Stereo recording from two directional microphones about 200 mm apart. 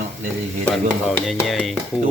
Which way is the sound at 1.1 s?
Centre (ahead or behind).